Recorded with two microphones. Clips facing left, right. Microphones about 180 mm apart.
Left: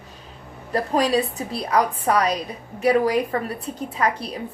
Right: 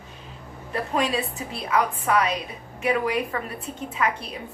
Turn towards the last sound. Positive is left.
turn(degrees=35)  # may be behind; listen again after turning